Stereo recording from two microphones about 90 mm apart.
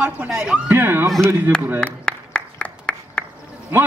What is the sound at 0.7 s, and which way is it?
Speech, 20° right (ahead or behind).